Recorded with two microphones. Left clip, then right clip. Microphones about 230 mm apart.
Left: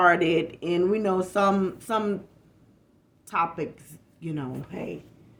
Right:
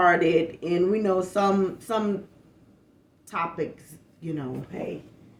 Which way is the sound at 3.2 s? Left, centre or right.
Left.